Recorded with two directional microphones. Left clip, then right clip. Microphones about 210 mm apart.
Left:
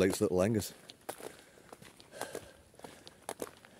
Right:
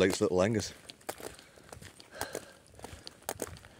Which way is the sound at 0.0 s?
10° left (ahead or behind).